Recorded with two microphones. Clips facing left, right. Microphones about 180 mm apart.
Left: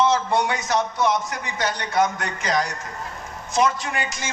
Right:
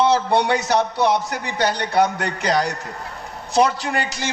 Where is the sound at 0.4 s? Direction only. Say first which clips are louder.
Right 4 dB; 35° right (ahead or behind).